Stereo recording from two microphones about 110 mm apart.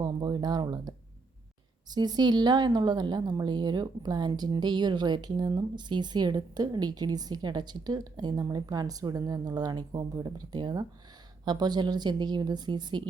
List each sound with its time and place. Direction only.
0.0 s speech: 40° right (ahead or behind)